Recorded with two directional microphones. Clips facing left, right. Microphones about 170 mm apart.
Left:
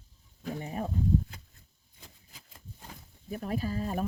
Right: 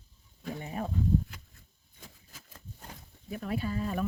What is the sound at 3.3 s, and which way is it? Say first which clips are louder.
Speech: left 1 dB; 40° left (ahead or behind).